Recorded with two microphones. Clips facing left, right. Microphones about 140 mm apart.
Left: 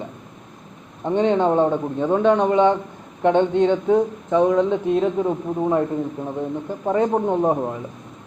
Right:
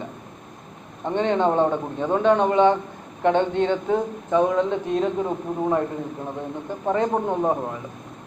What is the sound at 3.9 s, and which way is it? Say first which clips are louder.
Speech: left 3 dB; centre (ahead or behind).